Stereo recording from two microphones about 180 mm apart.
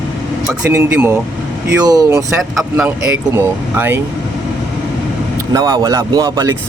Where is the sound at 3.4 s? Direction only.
10° right (ahead or behind).